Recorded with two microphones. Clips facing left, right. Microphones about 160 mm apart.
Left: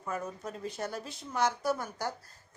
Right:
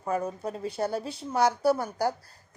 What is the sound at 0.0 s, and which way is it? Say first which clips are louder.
A woman's voice: right 7 dB; 35° right (ahead or behind).